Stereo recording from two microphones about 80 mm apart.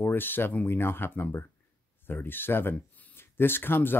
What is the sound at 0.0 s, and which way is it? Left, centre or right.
Speech, left.